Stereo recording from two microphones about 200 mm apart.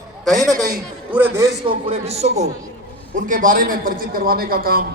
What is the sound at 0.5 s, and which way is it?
Speech, 45° right (ahead or behind).